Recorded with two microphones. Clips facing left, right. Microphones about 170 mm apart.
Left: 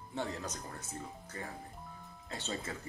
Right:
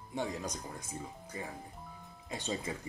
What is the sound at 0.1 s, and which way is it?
Speech, 15° right (ahead or behind).